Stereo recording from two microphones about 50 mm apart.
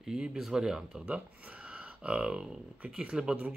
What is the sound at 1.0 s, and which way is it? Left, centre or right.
Speech, right.